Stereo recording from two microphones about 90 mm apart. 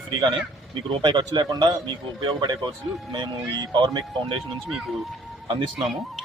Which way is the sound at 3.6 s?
55° right (ahead or behind).